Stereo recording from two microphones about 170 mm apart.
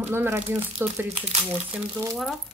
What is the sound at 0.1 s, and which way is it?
Speech, 15° right (ahead or behind).